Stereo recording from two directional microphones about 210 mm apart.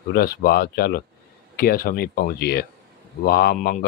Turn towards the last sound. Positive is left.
turn(degrees=45)  # may be behind; listen again after turning